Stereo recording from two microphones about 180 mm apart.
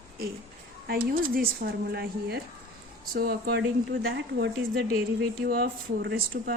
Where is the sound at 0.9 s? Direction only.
55° right (ahead or behind).